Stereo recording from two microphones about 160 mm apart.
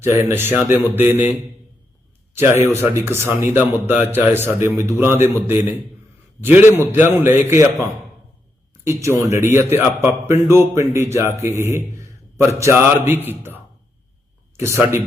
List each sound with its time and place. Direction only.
0.0 s a man's voice: 15° right (ahead or behind)
2.3 s a man's voice: 15° right (ahead or behind)